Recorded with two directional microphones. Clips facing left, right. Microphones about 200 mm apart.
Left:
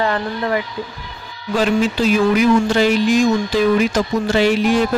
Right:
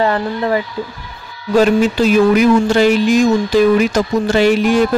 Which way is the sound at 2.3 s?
50° right (ahead or behind).